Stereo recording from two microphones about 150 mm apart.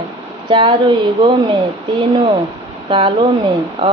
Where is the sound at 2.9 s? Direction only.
35° right (ahead or behind).